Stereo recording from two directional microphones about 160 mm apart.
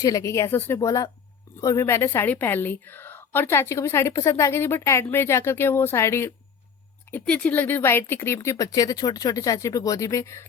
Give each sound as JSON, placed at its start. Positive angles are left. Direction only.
{"t": 0.0, "sound": "a woman's voice", "side_deg": 20}